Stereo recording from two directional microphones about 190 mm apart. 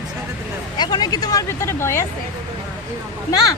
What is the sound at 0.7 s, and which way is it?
Speech, 20° left (ahead or behind).